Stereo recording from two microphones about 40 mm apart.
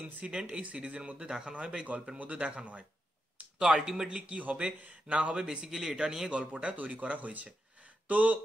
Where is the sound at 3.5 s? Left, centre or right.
Right.